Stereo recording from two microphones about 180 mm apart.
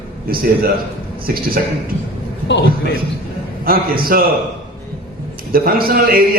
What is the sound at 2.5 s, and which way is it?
Speech, 75° left (ahead or behind).